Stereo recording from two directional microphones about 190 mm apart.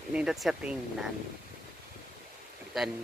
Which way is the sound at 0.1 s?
5° right (ahead or behind).